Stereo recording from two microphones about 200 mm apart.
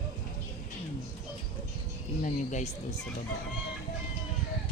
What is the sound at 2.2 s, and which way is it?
Speech, 35° left (ahead or behind).